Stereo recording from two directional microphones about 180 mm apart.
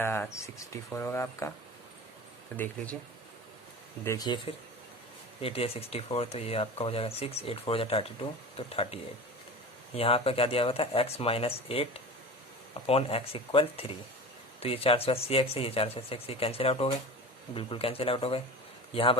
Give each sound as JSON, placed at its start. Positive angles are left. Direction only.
{"t": 0.0, "sound": "speech", "side_deg": 10}
{"t": 4.0, "sound": "speech", "side_deg": 20}